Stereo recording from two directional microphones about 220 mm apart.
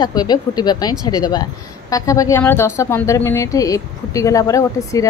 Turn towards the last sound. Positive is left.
turn(degrees=15)  # may be behind; listen again after turning